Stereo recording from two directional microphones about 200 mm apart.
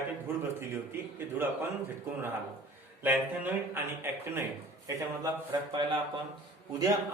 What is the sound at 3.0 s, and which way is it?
A man's voice, 10° right (ahead or behind).